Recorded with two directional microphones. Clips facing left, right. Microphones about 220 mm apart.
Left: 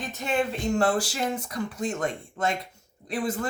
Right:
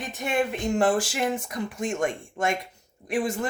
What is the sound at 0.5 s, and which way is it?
Speech, 20° right (ahead or behind).